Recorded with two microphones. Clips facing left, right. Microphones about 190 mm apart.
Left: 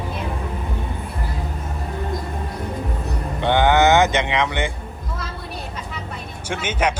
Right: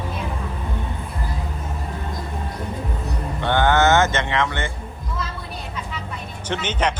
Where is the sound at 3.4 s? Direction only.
15° left (ahead or behind).